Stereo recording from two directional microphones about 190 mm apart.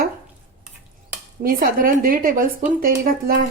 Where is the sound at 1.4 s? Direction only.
45° right (ahead or behind).